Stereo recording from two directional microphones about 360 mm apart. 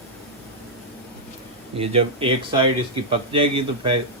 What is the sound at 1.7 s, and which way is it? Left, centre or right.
Speech, centre.